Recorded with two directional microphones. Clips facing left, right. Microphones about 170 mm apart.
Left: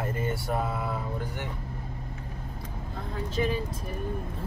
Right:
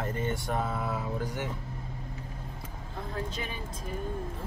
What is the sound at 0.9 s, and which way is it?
Speech, 5° right (ahead or behind).